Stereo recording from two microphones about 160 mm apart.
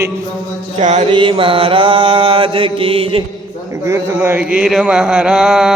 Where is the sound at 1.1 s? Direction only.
30° right (ahead or behind).